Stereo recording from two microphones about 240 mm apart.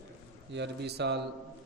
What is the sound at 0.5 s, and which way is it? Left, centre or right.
Speech, right.